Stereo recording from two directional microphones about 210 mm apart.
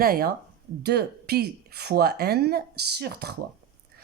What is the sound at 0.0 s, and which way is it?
Speech, 45° right (ahead or behind).